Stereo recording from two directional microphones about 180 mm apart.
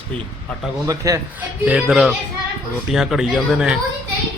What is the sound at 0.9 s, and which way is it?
A man's voice, 15° right (ahead or behind).